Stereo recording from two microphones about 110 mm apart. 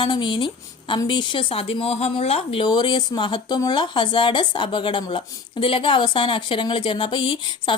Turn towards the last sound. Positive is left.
turn(degrees=50)  # may be behind; listen again after turning